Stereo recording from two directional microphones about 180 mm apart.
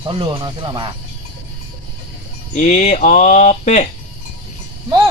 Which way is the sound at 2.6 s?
40° left (ahead or behind).